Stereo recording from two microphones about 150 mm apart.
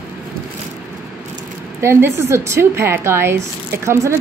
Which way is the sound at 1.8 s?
15° right (ahead or behind).